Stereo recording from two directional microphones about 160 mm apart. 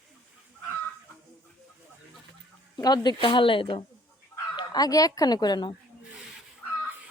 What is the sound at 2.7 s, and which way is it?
Speech, 25° left (ahead or behind).